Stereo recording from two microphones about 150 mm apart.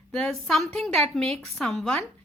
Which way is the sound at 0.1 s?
5° left (ahead or behind).